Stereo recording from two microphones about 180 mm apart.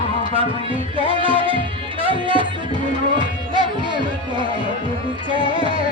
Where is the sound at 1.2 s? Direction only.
30° right (ahead or behind).